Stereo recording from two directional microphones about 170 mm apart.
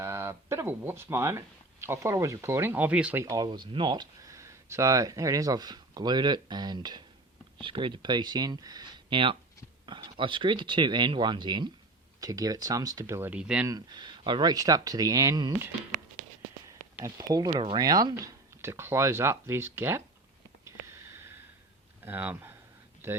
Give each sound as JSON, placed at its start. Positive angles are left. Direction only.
{"t": 0.0, "sound": "speech", "side_deg": -15}
{"t": 13.7, "sound": "speech", "side_deg": -25}
{"t": 16.6, "sound": "a sound", "side_deg": -20}
{"t": 17.5, "sound": "speech", "side_deg": -30}
{"t": 22.0, "sound": "speech", "side_deg": -10}